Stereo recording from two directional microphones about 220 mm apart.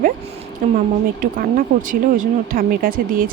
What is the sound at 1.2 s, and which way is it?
Speech, 40° right (ahead or behind).